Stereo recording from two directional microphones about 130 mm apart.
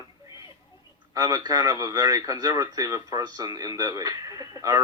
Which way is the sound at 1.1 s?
30° right (ahead or behind).